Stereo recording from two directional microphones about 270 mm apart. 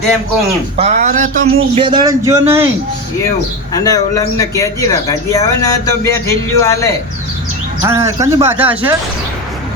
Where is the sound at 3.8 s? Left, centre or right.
Centre.